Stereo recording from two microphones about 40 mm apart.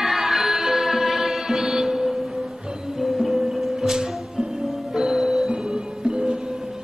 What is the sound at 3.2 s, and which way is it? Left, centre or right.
Music, centre.